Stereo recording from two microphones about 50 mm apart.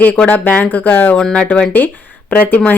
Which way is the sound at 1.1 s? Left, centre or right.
Centre.